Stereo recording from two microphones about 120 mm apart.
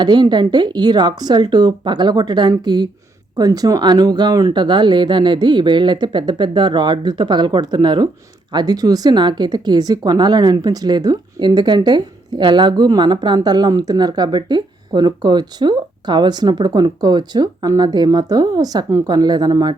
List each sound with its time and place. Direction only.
0.0 s speech: 35° right (ahead or behind)